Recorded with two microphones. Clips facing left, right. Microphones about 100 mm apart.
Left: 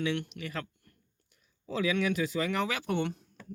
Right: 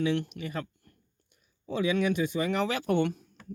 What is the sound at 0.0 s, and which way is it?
Speech, 35° right (ahead or behind).